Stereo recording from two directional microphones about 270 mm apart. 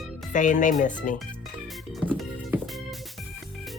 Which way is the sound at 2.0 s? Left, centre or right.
Centre.